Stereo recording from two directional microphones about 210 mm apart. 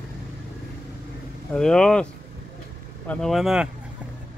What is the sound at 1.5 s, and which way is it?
Speech, 5° left (ahead or behind).